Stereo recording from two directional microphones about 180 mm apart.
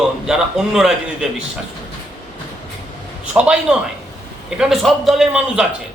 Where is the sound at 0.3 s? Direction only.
5° right (ahead or behind).